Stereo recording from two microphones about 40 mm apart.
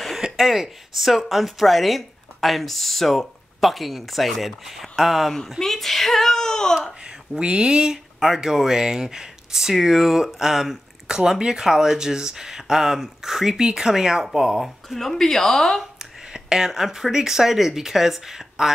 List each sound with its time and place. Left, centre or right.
0.2 s speech: centre
5.6 s speech: centre
6.9 s speech: centre
14.9 s speech: centre
15.8 s speech: centre